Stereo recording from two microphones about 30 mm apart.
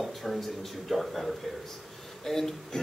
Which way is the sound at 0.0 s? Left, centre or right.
Centre.